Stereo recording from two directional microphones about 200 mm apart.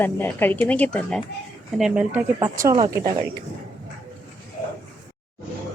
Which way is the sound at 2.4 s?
20° right (ahead or behind).